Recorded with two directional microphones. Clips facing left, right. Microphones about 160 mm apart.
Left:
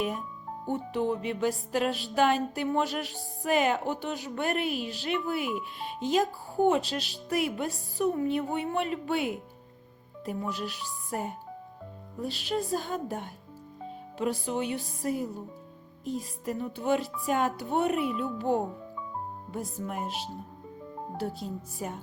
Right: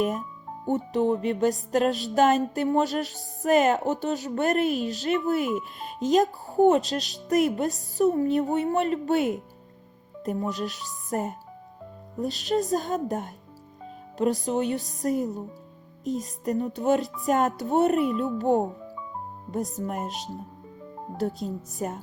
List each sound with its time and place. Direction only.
0.7 s music: 40° right (ahead or behind)
5.5 s speech: centre (ahead or behind)
6.1 s music: 40° right (ahead or behind)
19.7 s music: 40° right (ahead or behind)
21.4 s music: 40° right (ahead or behind)